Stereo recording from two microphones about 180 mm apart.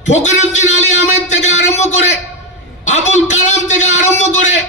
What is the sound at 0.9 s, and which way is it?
A man's voice, 40° left (ahead or behind).